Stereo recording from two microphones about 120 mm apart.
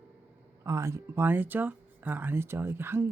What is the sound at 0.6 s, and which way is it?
Speech, 25° right (ahead or behind).